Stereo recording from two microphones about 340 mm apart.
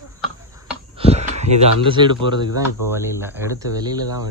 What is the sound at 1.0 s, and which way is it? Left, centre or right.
Speech, centre.